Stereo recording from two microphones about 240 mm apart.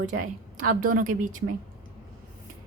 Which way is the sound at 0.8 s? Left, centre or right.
Right.